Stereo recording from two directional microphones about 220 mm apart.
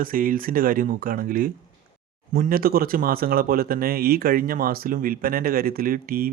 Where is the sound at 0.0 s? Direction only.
40° right (ahead or behind).